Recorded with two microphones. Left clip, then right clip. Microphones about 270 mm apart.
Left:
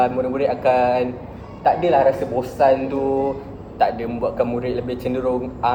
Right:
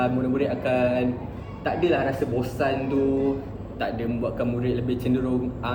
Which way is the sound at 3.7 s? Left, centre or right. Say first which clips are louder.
Left 9 dB; centre.